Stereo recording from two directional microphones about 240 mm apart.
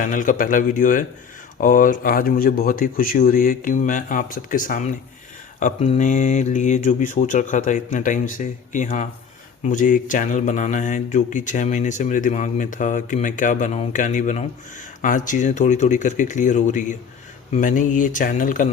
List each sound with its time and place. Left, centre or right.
0.0 s mantra: left